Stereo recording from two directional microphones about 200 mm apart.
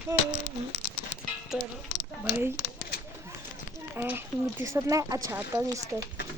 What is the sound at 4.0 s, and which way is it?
Speech, 10° right (ahead or behind).